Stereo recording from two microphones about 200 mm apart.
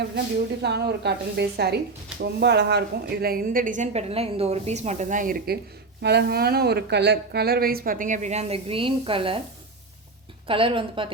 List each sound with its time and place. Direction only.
0.6 s a woman's voice: 55° right (ahead or behind)
6.0 s a woman's voice: 55° right (ahead or behind); by 9.4 s 25° right (ahead or behind)
10.4 s speech: 25° right (ahead or behind)